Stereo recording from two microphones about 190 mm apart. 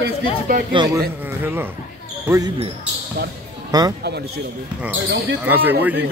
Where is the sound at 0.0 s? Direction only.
55° right (ahead or behind).